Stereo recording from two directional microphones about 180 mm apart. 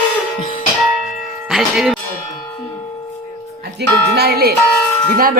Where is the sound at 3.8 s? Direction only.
60° right (ahead or behind).